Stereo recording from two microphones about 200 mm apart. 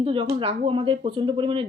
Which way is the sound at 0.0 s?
25° right (ahead or behind).